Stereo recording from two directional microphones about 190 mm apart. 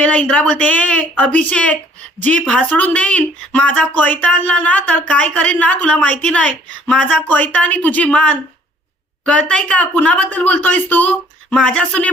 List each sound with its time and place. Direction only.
0.0 s speech: 5° left (ahead or behind)